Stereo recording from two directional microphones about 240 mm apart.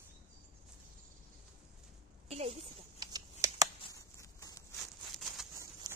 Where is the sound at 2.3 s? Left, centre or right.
Right.